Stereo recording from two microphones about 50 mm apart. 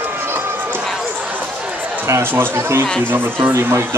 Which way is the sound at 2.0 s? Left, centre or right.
Right.